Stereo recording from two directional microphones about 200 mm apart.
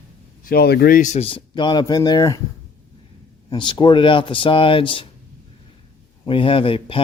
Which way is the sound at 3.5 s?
25° left (ahead or behind).